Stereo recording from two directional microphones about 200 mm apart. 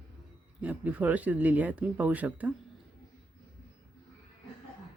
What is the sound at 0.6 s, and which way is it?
Speech, 10° right (ahead or behind).